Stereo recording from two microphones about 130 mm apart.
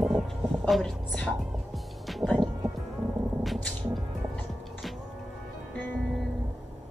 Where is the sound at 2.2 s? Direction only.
15° right (ahead or behind).